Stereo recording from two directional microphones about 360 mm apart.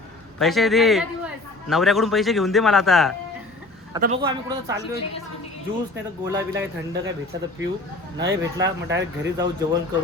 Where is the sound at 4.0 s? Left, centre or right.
Centre.